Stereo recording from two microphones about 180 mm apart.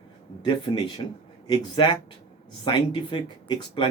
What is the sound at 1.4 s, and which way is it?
Speech, 25° left (ahead or behind).